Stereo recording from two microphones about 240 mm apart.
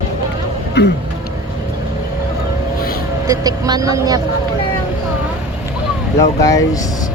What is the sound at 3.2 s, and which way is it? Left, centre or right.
Speech, centre.